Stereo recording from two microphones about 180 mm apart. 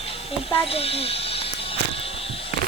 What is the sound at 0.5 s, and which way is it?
Speech, 30° left (ahead or behind).